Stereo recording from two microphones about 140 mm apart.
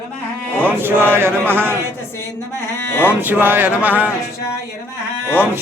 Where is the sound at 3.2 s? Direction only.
15° right (ahead or behind).